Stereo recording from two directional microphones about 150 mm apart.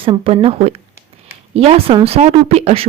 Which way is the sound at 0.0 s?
35° right (ahead or behind).